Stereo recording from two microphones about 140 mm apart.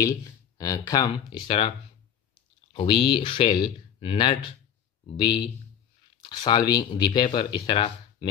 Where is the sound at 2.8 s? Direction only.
35° left (ahead or behind).